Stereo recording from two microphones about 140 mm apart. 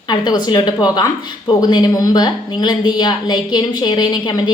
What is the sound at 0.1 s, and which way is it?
A woman's voice, 30° left (ahead or behind).